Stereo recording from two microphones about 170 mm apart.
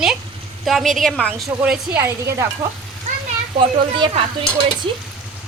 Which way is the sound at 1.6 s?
10° right (ahead or behind).